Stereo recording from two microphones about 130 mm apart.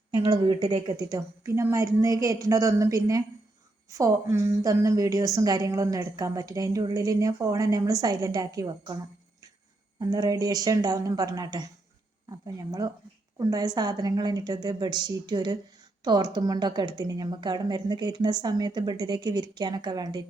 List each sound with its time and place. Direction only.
0.2 s a woman's voice: 40° right (ahead or behind)
0.7 s a woman's voice: 30° right (ahead or behind)
10.0 s a woman's voice: 30° right (ahead or behind)